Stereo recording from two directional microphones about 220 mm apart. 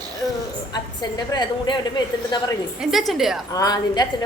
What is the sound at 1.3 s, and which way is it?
A woman's voice, 20° left (ahead or behind).